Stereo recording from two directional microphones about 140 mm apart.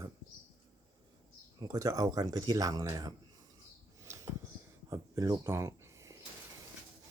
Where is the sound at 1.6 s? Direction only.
25° right (ahead or behind).